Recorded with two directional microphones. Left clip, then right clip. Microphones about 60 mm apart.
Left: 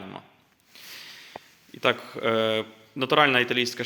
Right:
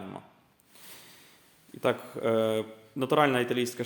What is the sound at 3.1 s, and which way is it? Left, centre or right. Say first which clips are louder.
Speech: left 5 dB; centre.